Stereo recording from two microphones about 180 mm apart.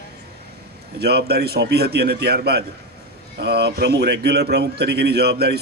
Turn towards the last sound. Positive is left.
turn(degrees=-65)  # may be behind; listen again after turning